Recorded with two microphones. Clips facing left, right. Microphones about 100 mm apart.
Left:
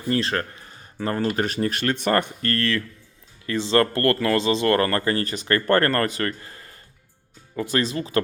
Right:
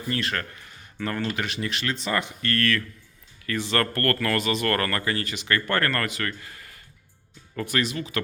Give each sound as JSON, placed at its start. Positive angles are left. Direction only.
{"t": 0.1, "sound": "speech", "side_deg": 30}
{"t": 2.5, "sound": "speech", "side_deg": 30}
{"t": 7.5, "sound": "speech", "side_deg": 20}
{"t": 7.8, "sound": "speech", "side_deg": 35}